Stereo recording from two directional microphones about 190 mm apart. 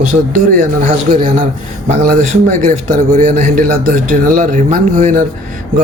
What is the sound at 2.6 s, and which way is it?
A man's voice, 40° right (ahead or behind).